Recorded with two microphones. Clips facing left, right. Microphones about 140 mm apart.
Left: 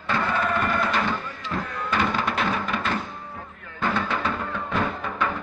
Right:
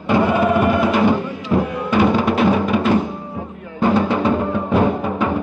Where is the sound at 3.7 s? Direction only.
25° right (ahead or behind).